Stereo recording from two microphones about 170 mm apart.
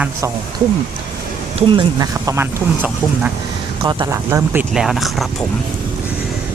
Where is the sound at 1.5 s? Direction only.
30° right (ahead or behind).